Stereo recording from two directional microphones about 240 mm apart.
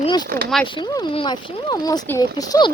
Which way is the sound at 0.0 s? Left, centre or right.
Centre.